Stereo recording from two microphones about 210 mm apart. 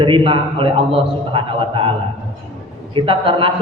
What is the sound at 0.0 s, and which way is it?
A man's voice, 25° right (ahead or behind).